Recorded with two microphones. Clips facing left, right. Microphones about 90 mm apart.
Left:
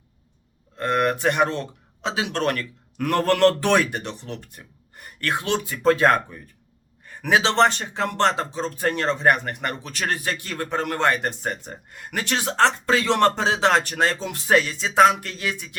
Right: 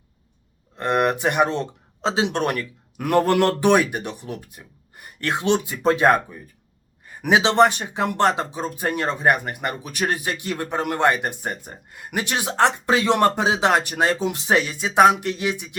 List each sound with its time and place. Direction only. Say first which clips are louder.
0.8 s speech: right 1 dB; 20° right (ahead or behind)
2.0 s speech: right 3 dB; 30° right (ahead or behind)